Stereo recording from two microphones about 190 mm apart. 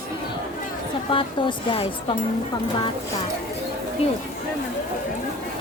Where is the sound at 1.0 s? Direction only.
25° left (ahead or behind).